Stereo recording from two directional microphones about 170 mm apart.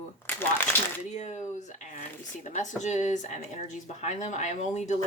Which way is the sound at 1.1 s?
40° left (ahead or behind).